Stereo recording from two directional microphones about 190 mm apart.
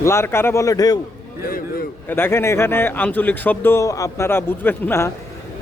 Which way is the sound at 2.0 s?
10° left (ahead or behind).